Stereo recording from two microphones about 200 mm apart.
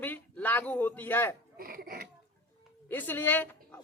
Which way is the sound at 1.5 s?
50° right (ahead or behind).